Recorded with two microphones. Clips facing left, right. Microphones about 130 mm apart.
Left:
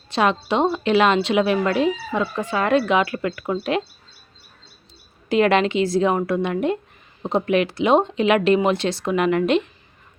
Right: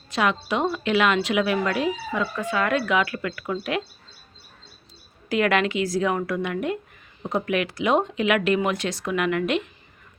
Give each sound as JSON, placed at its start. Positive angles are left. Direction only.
{"t": 0.1, "sound": "a woman's voice", "side_deg": 30}
{"t": 5.3, "sound": "a woman's voice", "side_deg": 25}